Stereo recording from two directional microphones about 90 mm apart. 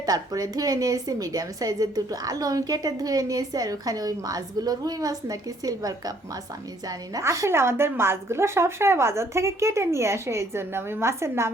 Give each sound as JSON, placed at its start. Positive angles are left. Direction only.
{"t": 0.0, "sound": "a woman's voice", "side_deg": -45}